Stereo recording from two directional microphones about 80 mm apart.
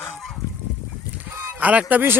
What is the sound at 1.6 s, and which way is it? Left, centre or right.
Speech, centre.